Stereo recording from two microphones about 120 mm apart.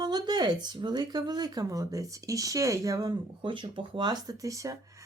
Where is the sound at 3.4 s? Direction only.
45° right (ahead or behind); by 4.7 s 25° right (ahead or behind).